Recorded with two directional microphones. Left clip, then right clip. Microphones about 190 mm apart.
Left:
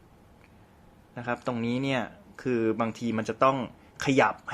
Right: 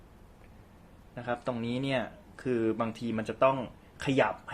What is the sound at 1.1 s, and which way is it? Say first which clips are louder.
Speech: left 2 dB; 20° left (ahead or behind).